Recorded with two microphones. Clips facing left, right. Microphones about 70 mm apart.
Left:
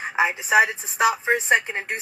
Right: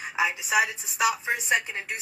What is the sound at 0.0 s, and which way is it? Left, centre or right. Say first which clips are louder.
Speech: left 4 dB; left.